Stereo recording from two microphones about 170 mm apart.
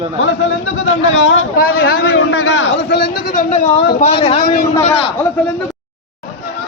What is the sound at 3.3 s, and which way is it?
Speech, 40° left (ahead or behind).